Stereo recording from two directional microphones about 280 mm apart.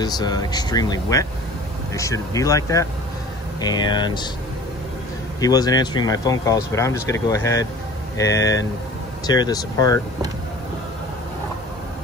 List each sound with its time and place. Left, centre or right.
0.0 s speech: centre
5.4 s speech: centre